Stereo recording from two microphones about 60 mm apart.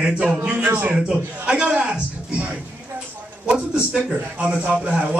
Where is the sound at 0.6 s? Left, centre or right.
Right.